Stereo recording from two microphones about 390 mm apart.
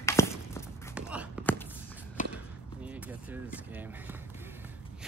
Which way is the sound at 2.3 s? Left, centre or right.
Centre.